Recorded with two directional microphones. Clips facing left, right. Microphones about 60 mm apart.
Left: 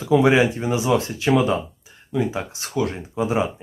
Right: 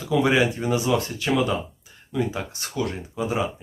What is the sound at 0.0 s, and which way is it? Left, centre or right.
Speech, left.